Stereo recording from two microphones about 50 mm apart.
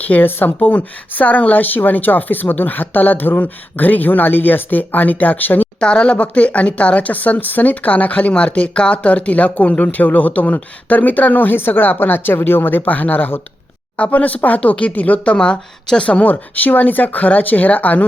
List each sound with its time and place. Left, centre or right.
0.1 s speech: left
5.8 s speech: centre; by 13.4 s left
13.9 s speech: left
16.2 s speech: left